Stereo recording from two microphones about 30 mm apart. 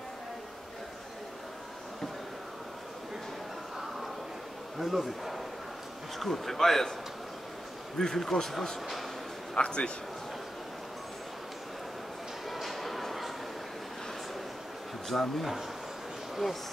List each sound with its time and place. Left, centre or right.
4.7 s a man's voice: centre
6.1 s speech: centre
8.0 s speech: centre
9.6 s a man's voice: left
12.4 s a sound: centre
15.0 s a man's voice: centre